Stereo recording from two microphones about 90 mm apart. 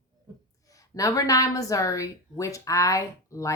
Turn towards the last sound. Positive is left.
turn(degrees=35)  # may be behind; listen again after turning